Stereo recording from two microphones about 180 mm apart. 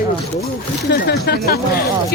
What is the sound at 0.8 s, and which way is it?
Speech, 65° left (ahead or behind).